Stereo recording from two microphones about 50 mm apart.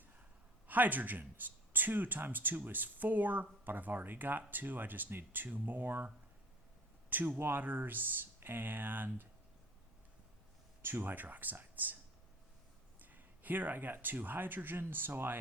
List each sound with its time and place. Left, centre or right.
0.7 s speech: right
7.1 s speech: right
11.0 s speech: right
13.0 s speech: right